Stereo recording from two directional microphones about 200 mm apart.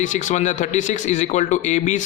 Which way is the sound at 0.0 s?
40° left (ahead or behind).